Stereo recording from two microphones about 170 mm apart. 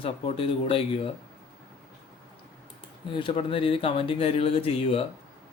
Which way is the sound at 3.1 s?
30° left (ahead or behind).